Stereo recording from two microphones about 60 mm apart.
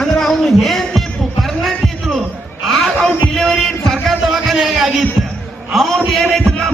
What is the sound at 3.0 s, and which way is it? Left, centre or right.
Music, centre.